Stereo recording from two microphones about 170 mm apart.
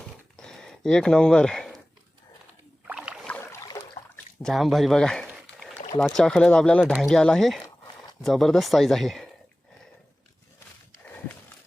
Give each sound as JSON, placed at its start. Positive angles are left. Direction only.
{"t": 0.3, "sound": "a sound", "side_deg": 5}
{"t": 2.8, "sound": "rowboat", "side_deg": -5}
{"t": 3.2, "sound": "boat", "side_deg": 10}
{"t": 4.4, "sound": "speech", "side_deg": 0}